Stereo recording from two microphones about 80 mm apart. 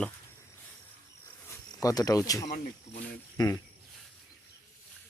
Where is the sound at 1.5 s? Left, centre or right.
Left.